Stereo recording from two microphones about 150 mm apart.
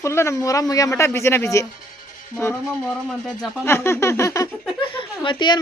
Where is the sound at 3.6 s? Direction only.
15° left (ahead or behind).